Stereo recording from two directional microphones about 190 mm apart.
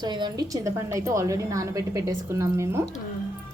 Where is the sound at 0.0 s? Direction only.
20° right (ahead or behind).